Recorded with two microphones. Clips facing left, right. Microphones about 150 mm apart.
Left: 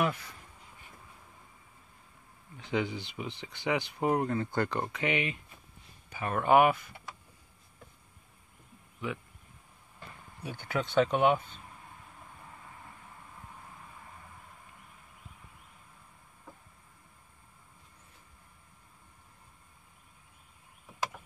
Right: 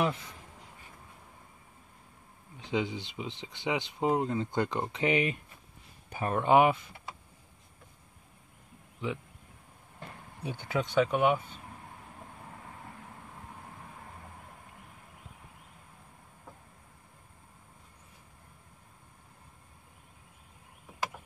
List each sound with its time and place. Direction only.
0.0 s speech: 25° right (ahead or behind)
2.5 s speech: 15° right (ahead or behind)
4.9 s speech: 35° right (ahead or behind)
6.2 s speech: 25° right (ahead or behind)
10.4 s speech: 25° right (ahead or behind); by 11.4 s 10° right (ahead or behind)